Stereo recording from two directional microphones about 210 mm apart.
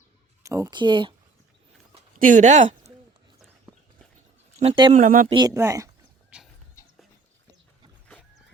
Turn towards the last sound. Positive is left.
turn(degrees=15)  # may be behind; listen again after turning